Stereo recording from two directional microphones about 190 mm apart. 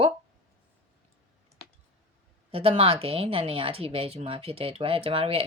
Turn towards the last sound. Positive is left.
turn(degrees=-30)  # may be behind; listen again after turning